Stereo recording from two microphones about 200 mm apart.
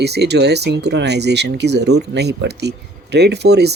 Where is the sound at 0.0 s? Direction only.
55° right (ahead or behind).